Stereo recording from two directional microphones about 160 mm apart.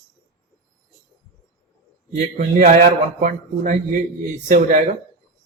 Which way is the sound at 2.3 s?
50° right (ahead or behind).